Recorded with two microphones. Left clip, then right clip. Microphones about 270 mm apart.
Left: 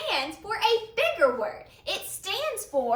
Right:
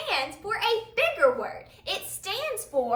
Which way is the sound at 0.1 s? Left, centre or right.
Centre.